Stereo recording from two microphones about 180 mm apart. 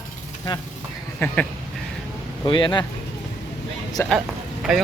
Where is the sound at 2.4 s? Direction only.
25° left (ahead or behind).